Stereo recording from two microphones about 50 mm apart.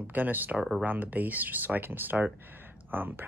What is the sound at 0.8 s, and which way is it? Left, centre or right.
Speech, right.